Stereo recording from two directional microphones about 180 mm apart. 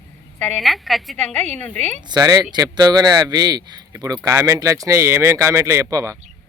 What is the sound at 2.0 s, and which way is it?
A man's voice, 20° right (ahead or behind).